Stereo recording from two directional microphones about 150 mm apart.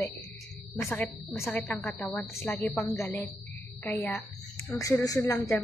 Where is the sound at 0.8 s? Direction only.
15° left (ahead or behind).